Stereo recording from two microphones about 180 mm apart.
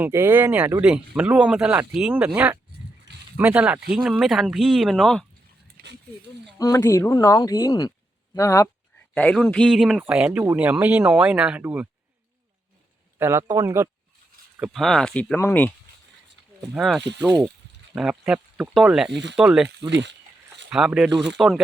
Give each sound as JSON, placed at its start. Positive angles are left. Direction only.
{"t": 0.0, "sound": "speech", "side_deg": -10}
{"t": 5.7, "sound": "a sound", "side_deg": -75}
{"t": 6.6, "sound": "speech", "side_deg": 15}
{"t": 13.1, "sound": "speech", "side_deg": -15}
{"t": 14.6, "sound": "speech", "side_deg": 0}
{"t": 16.7, "sound": "speech", "side_deg": 0}
{"t": 17.2, "sound": "speech", "side_deg": -15}
{"t": 17.9, "sound": "speech", "side_deg": -5}
{"t": 19.1, "sound": "speech", "side_deg": -75}
{"t": 19.4, "sound": "speech", "side_deg": -5}
{"t": 19.6, "sound": "speech", "side_deg": -75}
{"t": 20.7, "sound": "speech", "side_deg": -5}